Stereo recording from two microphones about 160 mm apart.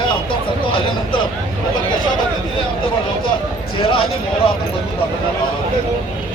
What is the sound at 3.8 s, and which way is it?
Speech, 35° left (ahead or behind).